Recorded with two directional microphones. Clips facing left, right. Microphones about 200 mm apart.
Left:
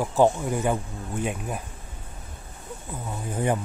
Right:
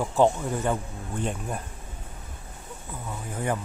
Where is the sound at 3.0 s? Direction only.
20° left (ahead or behind).